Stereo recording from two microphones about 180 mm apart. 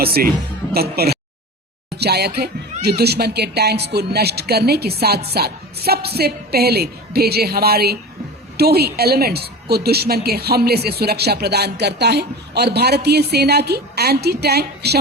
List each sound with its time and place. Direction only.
0.0 s speech: 55° right (ahead or behind)